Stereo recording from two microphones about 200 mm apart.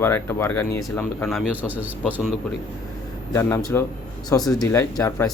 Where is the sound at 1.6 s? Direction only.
5° right (ahead or behind).